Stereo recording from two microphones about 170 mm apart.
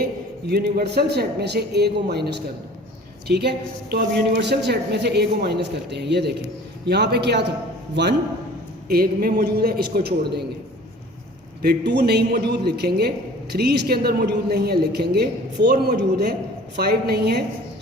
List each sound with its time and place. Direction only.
0.0 s a man's voice: 65° right (ahead or behind)
8.9 s a man's voice: 65° right (ahead or behind)
11.6 s a man's voice: 75° right (ahead or behind)